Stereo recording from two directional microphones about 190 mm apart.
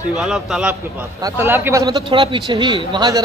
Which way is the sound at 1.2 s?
15° right (ahead or behind).